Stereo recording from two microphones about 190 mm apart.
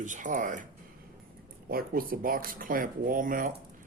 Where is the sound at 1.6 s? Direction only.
50° right (ahead or behind).